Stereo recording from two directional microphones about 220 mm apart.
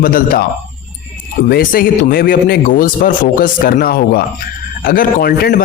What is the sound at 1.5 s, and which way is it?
A man's voice, 40° left (ahead or behind).